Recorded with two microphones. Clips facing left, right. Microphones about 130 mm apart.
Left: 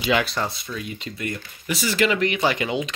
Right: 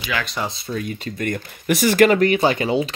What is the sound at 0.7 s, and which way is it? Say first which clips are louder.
Speech: right 5 dB; 45° right (ahead or behind).